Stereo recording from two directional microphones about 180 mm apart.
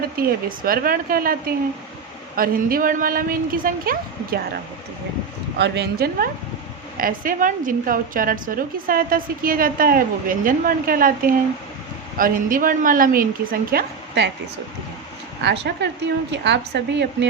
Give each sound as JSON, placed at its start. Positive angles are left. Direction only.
{"t": 0.2, "sound": "a woman's voice", "side_deg": -55}
{"t": 5.5, "sound": "speech", "side_deg": -70}
{"t": 6.9, "sound": "a woman's voice", "side_deg": -50}
{"t": 15.6, "sound": "speech", "side_deg": -70}